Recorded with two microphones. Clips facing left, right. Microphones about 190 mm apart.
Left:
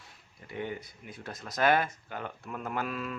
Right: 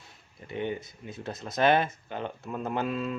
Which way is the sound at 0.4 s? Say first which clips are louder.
Right 4 dB; 25° right (ahead or behind).